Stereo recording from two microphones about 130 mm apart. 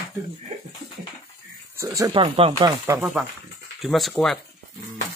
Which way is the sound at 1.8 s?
25° right (ahead or behind).